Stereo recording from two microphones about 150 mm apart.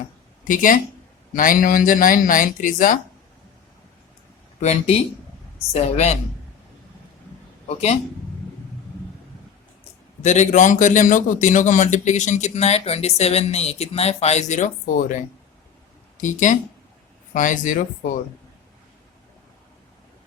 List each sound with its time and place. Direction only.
0.4 s speech: 60° left (ahead or behind)
4.6 s a man's voice: 45° left (ahead or behind)
10.2 s a man's voice: 50° left (ahead or behind)